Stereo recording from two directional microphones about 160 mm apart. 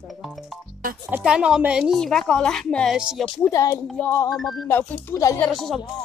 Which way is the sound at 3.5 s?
20° left (ahead or behind).